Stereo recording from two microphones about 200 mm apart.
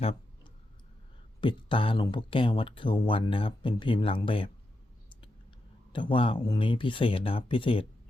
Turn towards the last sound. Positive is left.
turn(degrees=25)  # may be behind; listen again after turning